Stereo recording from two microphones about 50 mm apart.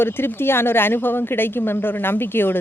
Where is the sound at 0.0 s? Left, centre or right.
Left.